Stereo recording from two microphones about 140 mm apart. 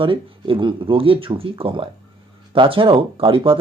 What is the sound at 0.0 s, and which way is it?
Speech, 40° right (ahead or behind).